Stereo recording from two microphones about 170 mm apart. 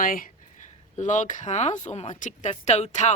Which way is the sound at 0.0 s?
55° left (ahead or behind).